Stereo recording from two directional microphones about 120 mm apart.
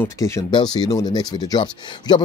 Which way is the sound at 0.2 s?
25° left (ahead or behind).